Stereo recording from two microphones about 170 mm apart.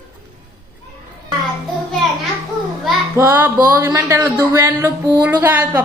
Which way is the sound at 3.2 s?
15° right (ahead or behind).